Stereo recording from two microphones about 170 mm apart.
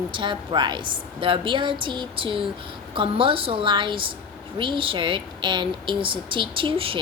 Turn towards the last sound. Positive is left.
turn(degrees=-30)  # may be behind; listen again after turning